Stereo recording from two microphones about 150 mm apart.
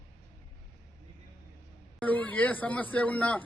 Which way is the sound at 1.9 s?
10° left (ahead or behind).